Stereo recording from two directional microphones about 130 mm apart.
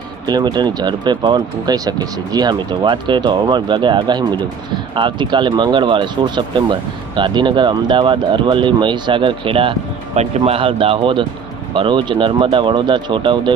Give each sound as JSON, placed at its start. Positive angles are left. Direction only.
{"t": 0.3, "sound": "speech", "side_deg": -35}
{"t": 10.2, "sound": "speech", "side_deg": -55}